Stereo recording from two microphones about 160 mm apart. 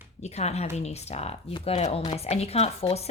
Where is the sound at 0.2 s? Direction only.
45° left (ahead or behind).